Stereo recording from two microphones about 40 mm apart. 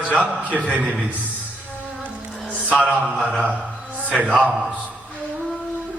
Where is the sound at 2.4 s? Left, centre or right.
Right.